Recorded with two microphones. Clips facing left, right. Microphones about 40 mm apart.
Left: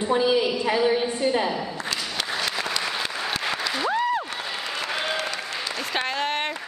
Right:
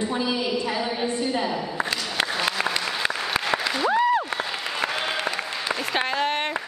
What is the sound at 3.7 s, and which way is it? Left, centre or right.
Applause, centre.